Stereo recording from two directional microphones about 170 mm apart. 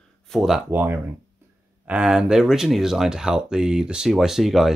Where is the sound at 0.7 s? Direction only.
15° right (ahead or behind).